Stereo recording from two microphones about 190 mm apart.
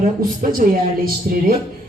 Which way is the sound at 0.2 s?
50° right (ahead or behind).